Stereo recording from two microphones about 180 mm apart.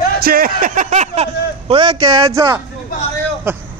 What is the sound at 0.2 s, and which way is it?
A man's voice, 55° right (ahead or behind).